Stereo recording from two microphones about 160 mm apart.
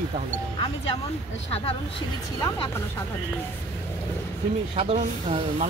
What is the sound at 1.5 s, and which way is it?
Speech, 40° left (ahead or behind).